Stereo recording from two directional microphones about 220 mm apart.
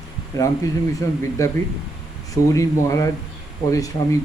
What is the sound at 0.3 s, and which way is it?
Speech, 15° left (ahead or behind).